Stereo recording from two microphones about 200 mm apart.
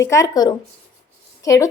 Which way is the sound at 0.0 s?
15° left (ahead or behind).